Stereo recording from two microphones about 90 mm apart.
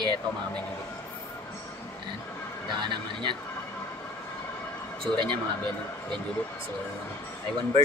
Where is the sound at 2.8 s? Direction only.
60° right (ahead or behind).